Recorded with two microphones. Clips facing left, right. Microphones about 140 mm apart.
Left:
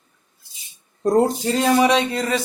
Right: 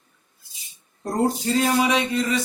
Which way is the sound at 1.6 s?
70° left (ahead or behind).